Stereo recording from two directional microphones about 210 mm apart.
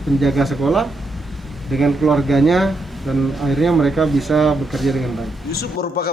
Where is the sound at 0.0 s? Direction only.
Centre (ahead or behind).